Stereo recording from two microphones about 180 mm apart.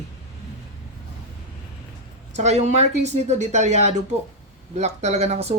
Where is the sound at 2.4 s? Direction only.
40° right (ahead or behind).